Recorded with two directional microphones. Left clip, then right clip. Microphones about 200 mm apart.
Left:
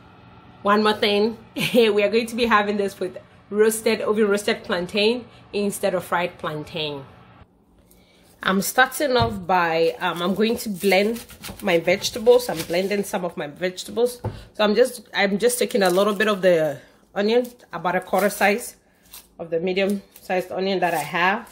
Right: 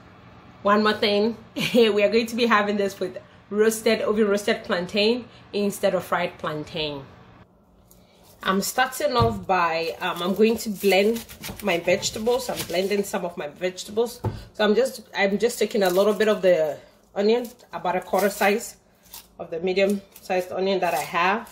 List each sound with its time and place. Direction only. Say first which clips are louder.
0.7 s a woman's voice: left 1 dB; 15° left (ahead or behind)
8.4 s speech: left 4 dB; 50° left (ahead or behind)